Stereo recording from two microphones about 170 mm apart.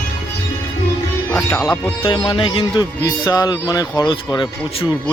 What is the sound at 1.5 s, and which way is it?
Speech, 20° left (ahead or behind).